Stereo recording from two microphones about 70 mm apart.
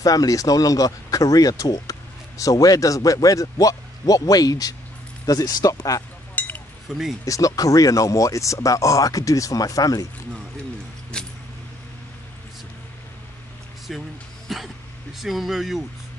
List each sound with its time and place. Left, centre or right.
0.0 s speech: left
6.3 s chink: left
6.9 s speech: centre
7.2 s speech: left
11.1 s keys jangling: centre
14.5 s speech: centre